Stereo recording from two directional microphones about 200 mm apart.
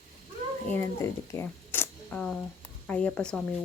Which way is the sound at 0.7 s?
10° left (ahead or behind).